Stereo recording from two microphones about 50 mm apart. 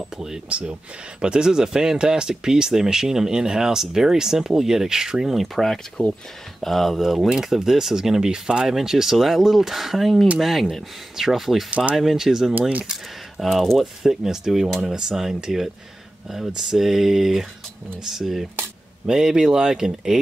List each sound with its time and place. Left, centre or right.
0.5 s speech: right; by 7.2 s centre
7.2 s speech: centre
14.0 s speech: centre